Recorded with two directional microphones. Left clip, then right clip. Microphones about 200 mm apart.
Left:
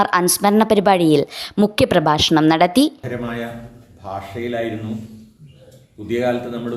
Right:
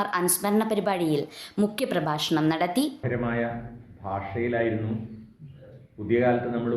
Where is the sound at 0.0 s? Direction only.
45° left (ahead or behind).